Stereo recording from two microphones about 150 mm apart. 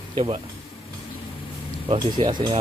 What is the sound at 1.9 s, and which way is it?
Speech, 35° right (ahead or behind).